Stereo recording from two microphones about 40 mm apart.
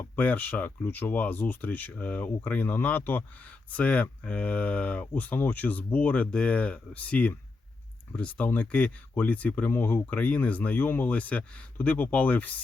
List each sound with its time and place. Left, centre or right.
0.2 s speech: left
0.8 s speech: left
11.1 s speech: left